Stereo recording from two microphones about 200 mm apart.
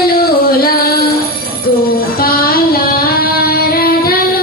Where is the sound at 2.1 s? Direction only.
45° left (ahead or behind).